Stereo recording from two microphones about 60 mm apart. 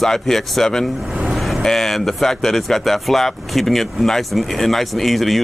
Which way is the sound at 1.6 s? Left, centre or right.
Centre.